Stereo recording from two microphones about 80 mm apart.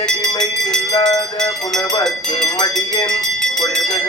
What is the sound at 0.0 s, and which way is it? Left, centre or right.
Music, centre.